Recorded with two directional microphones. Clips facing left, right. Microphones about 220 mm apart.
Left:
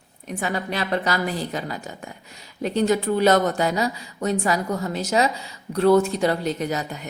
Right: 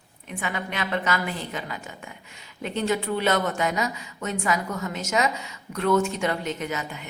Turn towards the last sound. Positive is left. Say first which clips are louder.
# left 4 dB
turn(degrees=40)  # may be behind; listen again after turning